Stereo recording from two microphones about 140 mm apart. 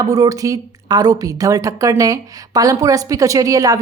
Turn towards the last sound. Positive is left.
turn(degrees=-25)  # may be behind; listen again after turning